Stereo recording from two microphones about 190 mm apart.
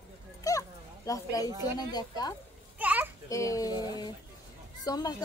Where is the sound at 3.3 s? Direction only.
15° left (ahead or behind).